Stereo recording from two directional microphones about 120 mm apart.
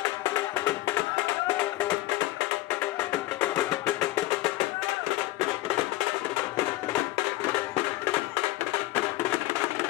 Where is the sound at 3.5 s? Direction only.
30° left (ahead or behind).